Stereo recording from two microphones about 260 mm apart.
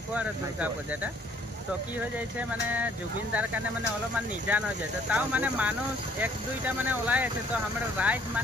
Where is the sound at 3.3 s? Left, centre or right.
Centre.